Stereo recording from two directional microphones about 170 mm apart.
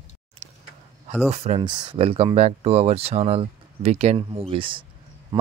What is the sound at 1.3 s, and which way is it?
Speech, 40° right (ahead or behind).